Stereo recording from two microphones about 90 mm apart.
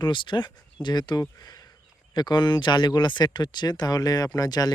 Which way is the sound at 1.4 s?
45° left (ahead or behind).